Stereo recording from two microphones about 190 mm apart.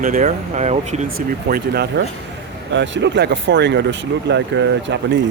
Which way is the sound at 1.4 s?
55° right (ahead or behind).